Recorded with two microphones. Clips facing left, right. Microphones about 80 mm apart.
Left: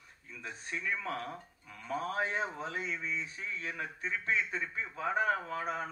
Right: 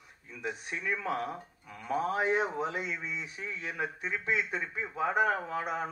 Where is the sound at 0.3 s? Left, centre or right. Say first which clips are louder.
Right 4 dB; centre.